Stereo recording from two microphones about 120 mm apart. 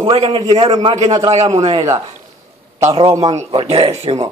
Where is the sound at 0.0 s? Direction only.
55° right (ahead or behind).